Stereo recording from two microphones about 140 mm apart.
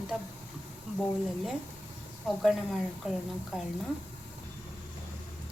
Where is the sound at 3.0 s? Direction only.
5° right (ahead or behind).